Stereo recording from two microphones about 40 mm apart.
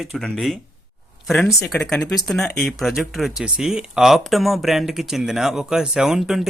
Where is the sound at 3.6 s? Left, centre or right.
Centre.